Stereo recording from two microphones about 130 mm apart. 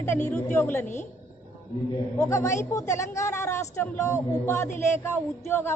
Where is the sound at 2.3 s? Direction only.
25° left (ahead or behind).